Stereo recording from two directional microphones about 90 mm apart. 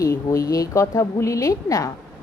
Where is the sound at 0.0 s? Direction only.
40° left (ahead or behind).